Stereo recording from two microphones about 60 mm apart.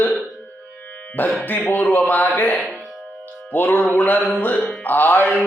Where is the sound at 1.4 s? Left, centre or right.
Left.